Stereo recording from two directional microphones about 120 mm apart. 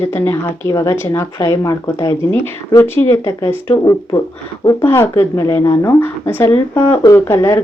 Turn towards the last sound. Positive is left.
turn(degrees=20)  # may be behind; listen again after turning